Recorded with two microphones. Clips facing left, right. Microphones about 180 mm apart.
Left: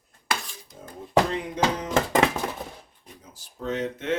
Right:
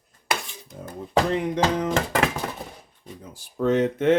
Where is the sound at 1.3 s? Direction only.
60° right (ahead or behind).